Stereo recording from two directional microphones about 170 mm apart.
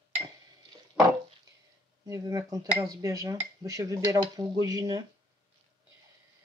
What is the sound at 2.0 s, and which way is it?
Speech, 20° right (ahead or behind).